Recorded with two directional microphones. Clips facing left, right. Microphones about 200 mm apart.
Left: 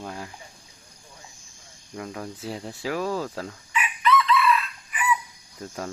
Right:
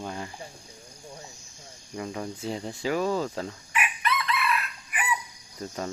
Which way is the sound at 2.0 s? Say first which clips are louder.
Right 1 dB; centre (ahead or behind).